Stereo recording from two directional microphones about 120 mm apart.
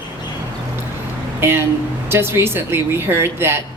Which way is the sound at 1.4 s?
20° right (ahead or behind).